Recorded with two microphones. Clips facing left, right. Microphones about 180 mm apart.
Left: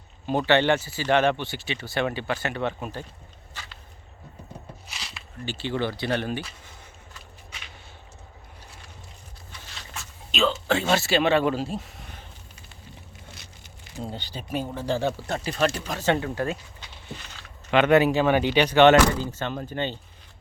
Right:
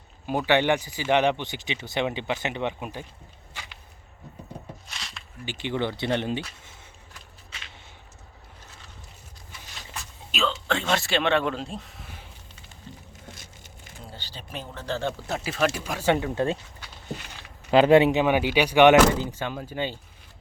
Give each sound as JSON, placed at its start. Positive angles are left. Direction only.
{"t": 0.3, "sound": "speech", "side_deg": -10}
{"t": 3.5, "sound": "walk", "side_deg": -15}
{"t": 4.9, "sound": "a sound", "side_deg": 5}
{"t": 5.5, "sound": "speech", "side_deg": -15}
{"t": 9.9, "sound": "speech", "side_deg": 0}
{"t": 13.3, "sound": "vehicle", "side_deg": -45}
{"t": 14.0, "sound": "speech", "side_deg": 20}
{"t": 15.4, "sound": "speech", "side_deg": -5}
{"t": 16.3, "sound": "speech", "side_deg": -25}
{"t": 17.7, "sound": "speech", "side_deg": -35}